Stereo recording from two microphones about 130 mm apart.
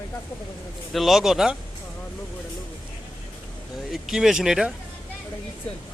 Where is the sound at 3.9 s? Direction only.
5° right (ahead or behind).